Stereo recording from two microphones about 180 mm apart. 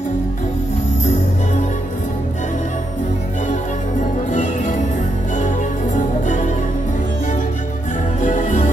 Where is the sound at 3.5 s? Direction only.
45° left (ahead or behind).